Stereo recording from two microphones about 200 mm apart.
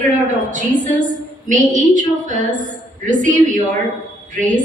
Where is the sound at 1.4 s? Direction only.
40° right (ahead or behind).